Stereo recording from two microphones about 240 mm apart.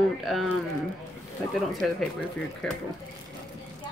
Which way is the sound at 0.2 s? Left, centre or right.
Centre.